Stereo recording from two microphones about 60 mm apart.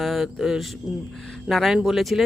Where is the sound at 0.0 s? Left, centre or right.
Centre.